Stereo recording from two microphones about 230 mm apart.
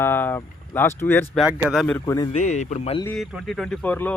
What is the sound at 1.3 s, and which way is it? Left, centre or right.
Speech, centre.